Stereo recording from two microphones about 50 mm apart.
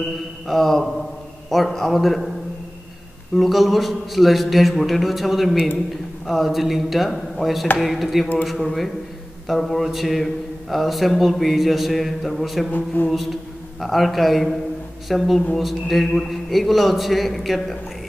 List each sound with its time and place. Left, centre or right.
0.5 s speech: centre
3.3 s speech: centre
12.7 s a sound: left
13.1 s a man's voice: centre